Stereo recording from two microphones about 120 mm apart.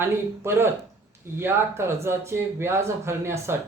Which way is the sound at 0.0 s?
20° right (ahead or behind).